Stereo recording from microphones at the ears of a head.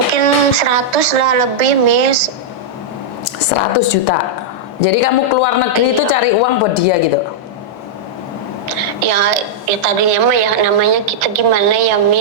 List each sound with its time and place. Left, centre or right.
0.1 s a woman's voice: right
3.2 s a woman's voice: left
8.7 s a woman's voice: right